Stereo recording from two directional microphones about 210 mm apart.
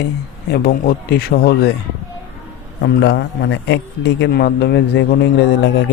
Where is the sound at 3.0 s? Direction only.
55° left (ahead or behind).